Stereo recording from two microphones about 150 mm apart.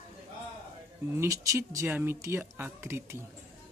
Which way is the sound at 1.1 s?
20° right (ahead or behind).